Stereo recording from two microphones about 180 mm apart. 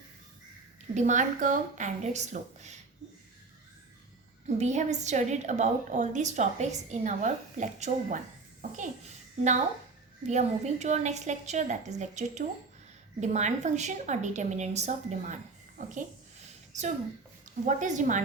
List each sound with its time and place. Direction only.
0.9 s a woman's voice: 45° right (ahead or behind)
4.4 s a woman's voice: 40° right (ahead or behind)
17.7 s a woman's voice: 45° right (ahead or behind)